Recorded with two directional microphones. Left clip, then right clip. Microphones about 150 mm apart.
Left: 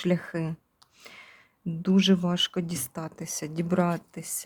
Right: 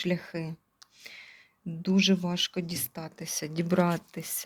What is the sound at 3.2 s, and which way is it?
Speech, 20° left (ahead or behind).